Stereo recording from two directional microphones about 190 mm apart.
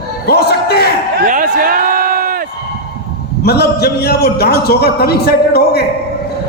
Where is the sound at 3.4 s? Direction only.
55° left (ahead or behind).